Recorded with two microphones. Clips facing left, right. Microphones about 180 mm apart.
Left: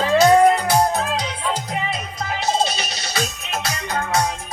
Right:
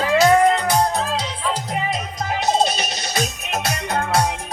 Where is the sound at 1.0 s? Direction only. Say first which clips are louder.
Even; centre (ahead or behind).